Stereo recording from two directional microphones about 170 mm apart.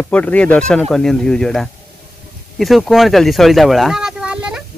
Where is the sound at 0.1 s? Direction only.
10° left (ahead or behind).